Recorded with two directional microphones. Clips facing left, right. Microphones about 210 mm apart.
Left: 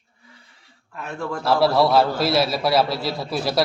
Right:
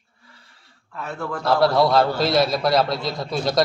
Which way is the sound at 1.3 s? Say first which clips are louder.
Even; 5° left (ahead or behind).